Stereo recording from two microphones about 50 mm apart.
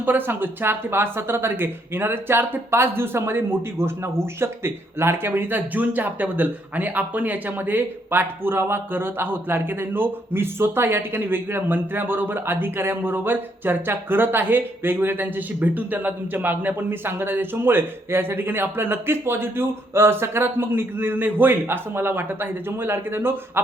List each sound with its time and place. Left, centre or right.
0.0 s speech: right